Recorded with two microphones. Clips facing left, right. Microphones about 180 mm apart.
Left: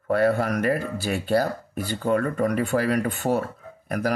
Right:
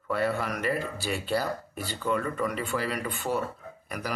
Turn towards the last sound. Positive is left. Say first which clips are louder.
# left 9 dB
turn(degrees=50)  # may be behind; listen again after turning